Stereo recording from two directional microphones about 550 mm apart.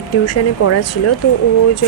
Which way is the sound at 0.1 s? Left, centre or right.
Left.